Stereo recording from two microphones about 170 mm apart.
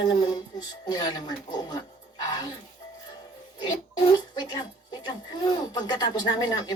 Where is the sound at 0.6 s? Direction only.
25° left (ahead or behind).